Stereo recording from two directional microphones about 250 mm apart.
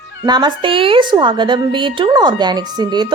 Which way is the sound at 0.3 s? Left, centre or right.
Centre.